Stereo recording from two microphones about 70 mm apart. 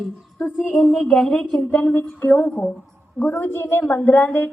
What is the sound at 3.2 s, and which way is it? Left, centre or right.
A woman's voice, left.